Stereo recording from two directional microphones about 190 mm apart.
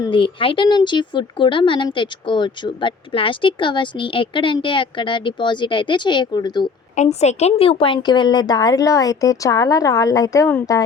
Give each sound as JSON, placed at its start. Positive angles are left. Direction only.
{"t": 0.0, "sound": "speech", "side_deg": 25}
{"t": 6.9, "sound": "speech", "side_deg": 35}